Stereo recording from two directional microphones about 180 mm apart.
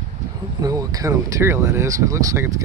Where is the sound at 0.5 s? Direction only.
20° right (ahead or behind).